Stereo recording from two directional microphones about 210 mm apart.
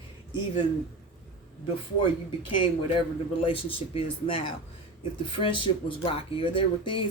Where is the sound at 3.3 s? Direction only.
25° left (ahead or behind).